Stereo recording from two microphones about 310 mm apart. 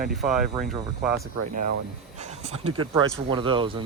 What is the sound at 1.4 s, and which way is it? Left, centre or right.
Speech, right.